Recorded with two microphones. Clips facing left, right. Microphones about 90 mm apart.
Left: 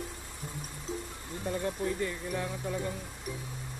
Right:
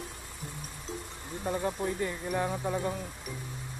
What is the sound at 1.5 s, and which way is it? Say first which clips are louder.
Speech: right 1 dB; 25° right (ahead or behind).